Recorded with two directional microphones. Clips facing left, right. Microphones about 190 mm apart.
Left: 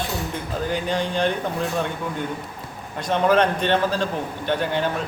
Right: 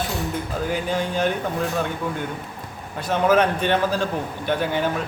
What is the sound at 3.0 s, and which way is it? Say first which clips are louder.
A man's voice: even; 5° right (ahead or behind).